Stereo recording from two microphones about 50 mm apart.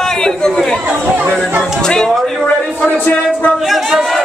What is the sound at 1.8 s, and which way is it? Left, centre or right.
Speech, centre.